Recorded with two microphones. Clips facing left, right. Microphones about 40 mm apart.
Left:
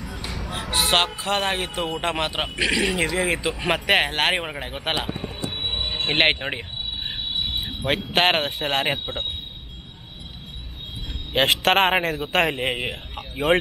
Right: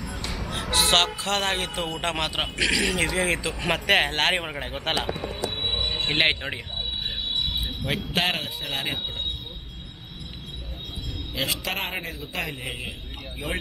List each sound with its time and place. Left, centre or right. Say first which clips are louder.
0.0 s a sound: even; centre
0.7 s speech: even; centre
5.5 s a sound: left 2 dB; centre
6.2 s speech: left 4 dB; left
7.8 s a man's voice: left 6 dB; left
11.3 s a man's voice: left 10 dB; left